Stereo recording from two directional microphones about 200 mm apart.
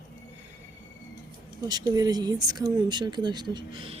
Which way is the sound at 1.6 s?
20° right (ahead or behind).